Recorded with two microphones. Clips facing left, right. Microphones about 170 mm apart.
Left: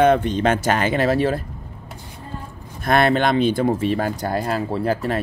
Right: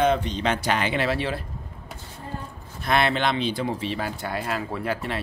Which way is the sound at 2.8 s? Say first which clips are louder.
Left 5 dB; 45° left (ahead or behind).